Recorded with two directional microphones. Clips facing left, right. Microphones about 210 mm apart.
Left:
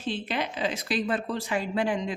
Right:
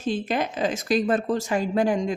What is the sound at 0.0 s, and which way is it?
Speech, 45° right (ahead or behind).